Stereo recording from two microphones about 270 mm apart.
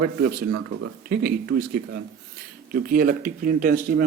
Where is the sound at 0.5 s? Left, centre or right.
Right.